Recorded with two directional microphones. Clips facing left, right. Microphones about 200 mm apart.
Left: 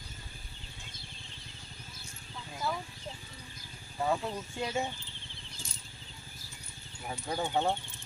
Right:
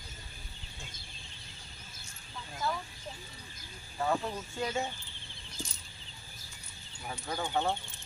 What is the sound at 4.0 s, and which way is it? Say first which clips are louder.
Speech: even; 15° left (ahead or behind).